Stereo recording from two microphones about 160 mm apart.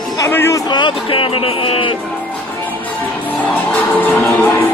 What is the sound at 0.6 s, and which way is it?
Speech, 30° left (ahead or behind).